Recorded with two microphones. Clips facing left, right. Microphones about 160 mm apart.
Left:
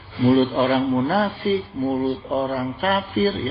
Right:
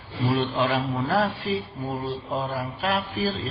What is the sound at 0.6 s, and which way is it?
Speech, 40° left (ahead or behind).